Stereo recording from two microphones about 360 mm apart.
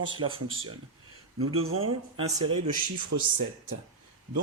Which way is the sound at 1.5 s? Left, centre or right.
Right.